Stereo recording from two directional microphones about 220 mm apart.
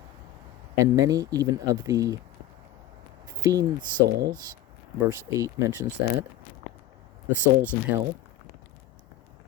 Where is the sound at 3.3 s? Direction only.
15° right (ahead or behind).